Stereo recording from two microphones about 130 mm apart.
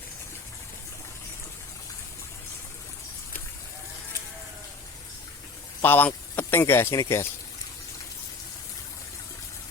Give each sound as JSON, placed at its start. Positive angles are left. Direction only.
{"t": 5.8, "sound": "speech", "side_deg": 15}